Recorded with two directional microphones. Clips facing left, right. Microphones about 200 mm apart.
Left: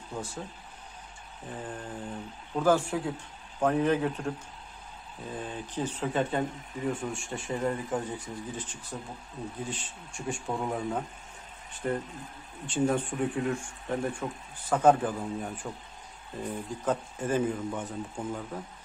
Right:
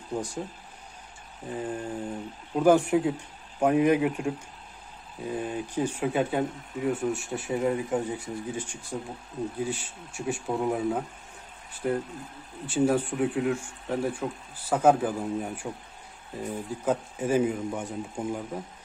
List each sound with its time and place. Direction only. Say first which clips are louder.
0.1 s speech: right 6 dB; 15° right (ahead or behind)
1.6 s speech: right 7 dB; 10° right (ahead or behind)
5.3 s speech: right 6 dB; 10° right (ahead or behind)
12.6 s speech: right 3 dB; 5° right (ahead or behind)